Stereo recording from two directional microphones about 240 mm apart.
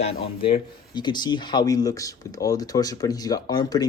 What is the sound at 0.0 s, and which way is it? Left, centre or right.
Speech, left.